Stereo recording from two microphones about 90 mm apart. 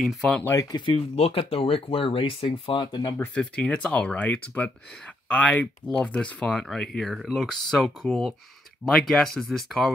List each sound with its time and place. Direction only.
0.0 s speech: centre (ahead or behind)
0.5 s speech: 40° left (ahead or behind)
0.7 s speech: 80° left; by 3.2 s 50° left (ahead or behind)
3.3 s speech: 15° left (ahead or behind)